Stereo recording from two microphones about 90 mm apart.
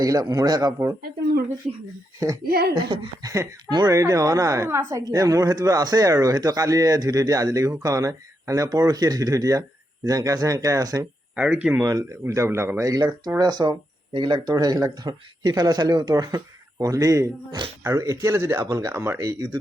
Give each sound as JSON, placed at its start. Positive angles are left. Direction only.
{"t": 0.0, "sound": "speech", "side_deg": -40}
{"t": 2.7, "sound": "speech", "side_deg": -70}
{"t": 3.2, "sound": "a woman's voice", "side_deg": -45}
{"t": 11.3, "sound": "speech", "side_deg": -15}
{"t": 11.8, "sound": "a woman's voice", "side_deg": -40}
{"t": 12.9, "sound": "a woman's voice", "side_deg": -50}